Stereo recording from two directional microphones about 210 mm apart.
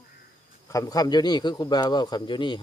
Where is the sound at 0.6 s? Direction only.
15° left (ahead or behind).